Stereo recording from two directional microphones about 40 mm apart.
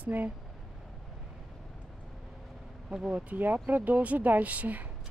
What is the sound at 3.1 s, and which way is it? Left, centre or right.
Speech, right.